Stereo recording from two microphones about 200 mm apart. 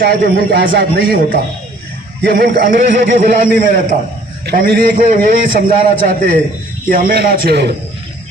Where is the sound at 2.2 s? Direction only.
55° right (ahead or behind).